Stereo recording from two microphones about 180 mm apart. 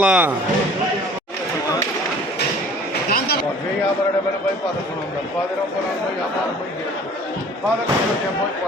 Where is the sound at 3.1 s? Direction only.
60° left (ahead or behind).